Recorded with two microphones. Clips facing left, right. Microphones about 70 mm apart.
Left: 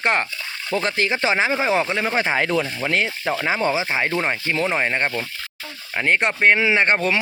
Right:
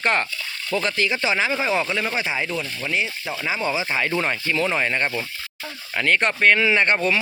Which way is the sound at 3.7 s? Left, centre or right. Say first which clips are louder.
Left 1 dB; left.